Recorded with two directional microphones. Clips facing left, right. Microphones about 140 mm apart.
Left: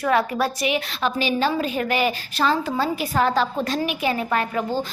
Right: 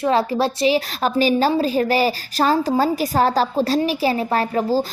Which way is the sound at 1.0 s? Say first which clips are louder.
Right 5 dB; 40° right (ahead or behind).